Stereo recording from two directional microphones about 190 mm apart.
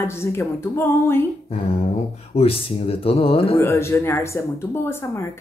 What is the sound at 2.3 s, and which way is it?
Speech, 30° left (ahead or behind).